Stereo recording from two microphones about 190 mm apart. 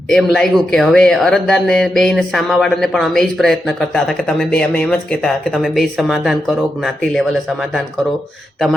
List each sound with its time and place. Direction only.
0.1 s speech: centre (ahead or behind)